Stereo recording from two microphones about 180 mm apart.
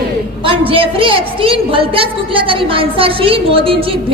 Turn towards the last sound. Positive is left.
turn(degrees=-30)  # may be behind; listen again after turning